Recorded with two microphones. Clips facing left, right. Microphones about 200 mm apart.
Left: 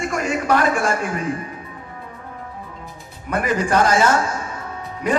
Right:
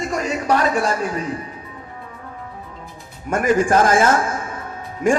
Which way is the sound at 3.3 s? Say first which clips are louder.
Right 3 dB; 45° right (ahead or behind).